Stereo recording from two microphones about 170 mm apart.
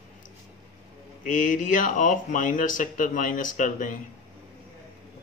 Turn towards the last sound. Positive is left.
turn(degrees=50)  # may be behind; listen again after turning